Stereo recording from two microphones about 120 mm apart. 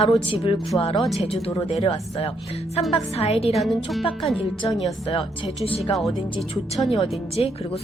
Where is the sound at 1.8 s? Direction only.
55° left (ahead or behind).